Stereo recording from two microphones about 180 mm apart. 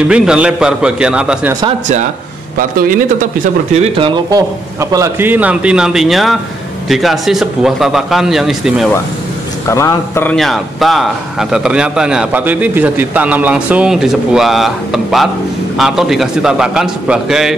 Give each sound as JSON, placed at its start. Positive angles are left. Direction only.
{"t": 0.1, "sound": "a man's voice", "side_deg": -5}
{"t": 2.8, "sound": "speech", "side_deg": -50}
{"t": 3.7, "sound": "speech", "side_deg": -35}
{"t": 4.3, "sound": "a man's voice", "side_deg": -20}
{"t": 9.7, "sound": "a man's voice", "side_deg": 15}
{"t": 10.3, "sound": "a man's voice", "side_deg": 0}